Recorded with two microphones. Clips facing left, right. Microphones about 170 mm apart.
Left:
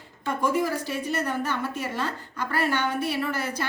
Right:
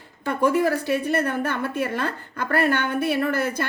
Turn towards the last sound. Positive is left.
turn(degrees=-55)  # may be behind; listen again after turning